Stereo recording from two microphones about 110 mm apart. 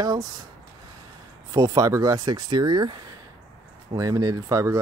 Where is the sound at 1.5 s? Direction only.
35° right (ahead or behind).